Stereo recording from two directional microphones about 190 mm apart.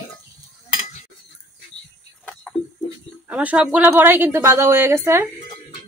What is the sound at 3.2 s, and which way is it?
Speech, 5° right (ahead or behind).